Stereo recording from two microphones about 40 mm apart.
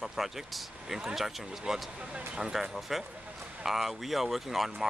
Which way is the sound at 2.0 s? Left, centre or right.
Right.